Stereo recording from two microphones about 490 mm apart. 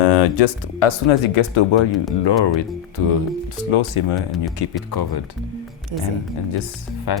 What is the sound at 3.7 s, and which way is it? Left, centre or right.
Speech, left.